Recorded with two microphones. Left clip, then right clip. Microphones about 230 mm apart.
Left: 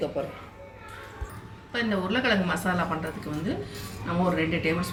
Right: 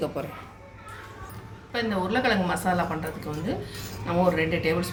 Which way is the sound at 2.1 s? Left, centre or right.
Centre.